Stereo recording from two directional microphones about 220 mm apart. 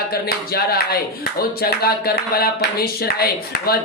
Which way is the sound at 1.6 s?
45° left (ahead or behind).